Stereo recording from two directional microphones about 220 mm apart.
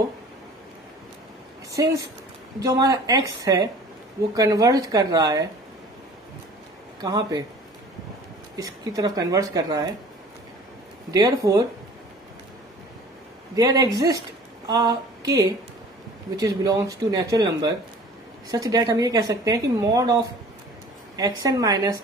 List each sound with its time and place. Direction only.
1.7 s speech: 15° right (ahead or behind)
7.0 s speech: 15° right (ahead or behind)
8.5 s speech: 15° right (ahead or behind)
11.1 s speech: 15° right (ahead or behind)
13.6 s speech: 15° right (ahead or behind)
14.7 s a sound: 15° right (ahead or behind)
16.3 s speech: 15° right (ahead or behind)